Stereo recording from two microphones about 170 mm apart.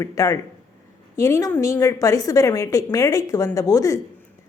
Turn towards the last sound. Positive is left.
turn(degrees=20)  # may be behind; listen again after turning